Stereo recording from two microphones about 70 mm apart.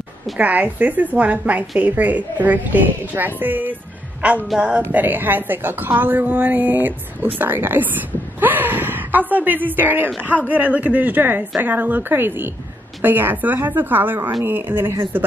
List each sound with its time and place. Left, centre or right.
0.4 s speech: right